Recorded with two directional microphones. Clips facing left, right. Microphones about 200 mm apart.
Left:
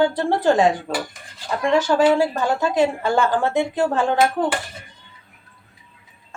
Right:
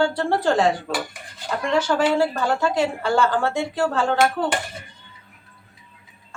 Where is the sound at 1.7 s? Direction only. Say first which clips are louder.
Left 3 dB; 15° left (ahead or behind).